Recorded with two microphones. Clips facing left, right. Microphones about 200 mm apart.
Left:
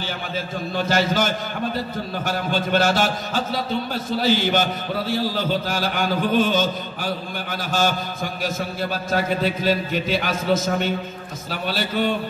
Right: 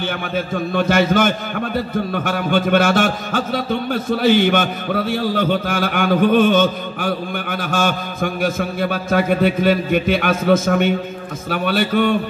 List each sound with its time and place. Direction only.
0.7 s a man's voice: 60° right (ahead or behind)